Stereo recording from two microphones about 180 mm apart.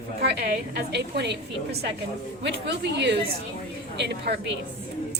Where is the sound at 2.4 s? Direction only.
75° right (ahead or behind).